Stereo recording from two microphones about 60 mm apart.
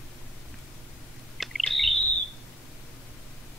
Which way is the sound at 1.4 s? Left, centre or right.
Centre.